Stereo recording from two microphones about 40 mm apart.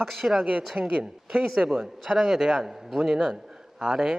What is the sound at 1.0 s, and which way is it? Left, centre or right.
A man's voice, centre.